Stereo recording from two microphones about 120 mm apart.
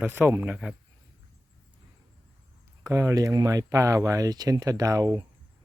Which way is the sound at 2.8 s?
25° right (ahead or behind).